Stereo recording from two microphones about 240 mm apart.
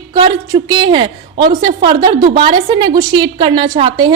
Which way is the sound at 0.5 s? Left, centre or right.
Centre.